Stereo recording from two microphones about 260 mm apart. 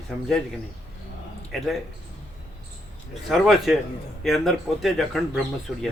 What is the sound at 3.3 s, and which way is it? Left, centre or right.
Speech, centre.